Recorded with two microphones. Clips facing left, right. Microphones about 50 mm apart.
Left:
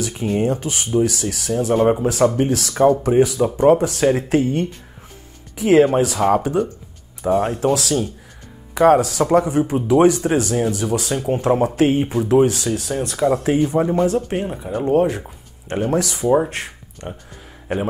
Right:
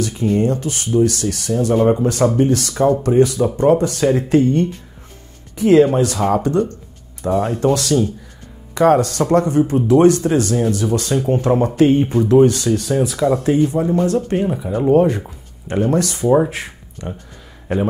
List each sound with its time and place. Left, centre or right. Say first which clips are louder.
0.5 s speech: right 1 dB; left
1.4 s speech: right 1 dB; centre
13.4 s speech: right 1 dB; centre
14.0 s speech: right 2 dB; centre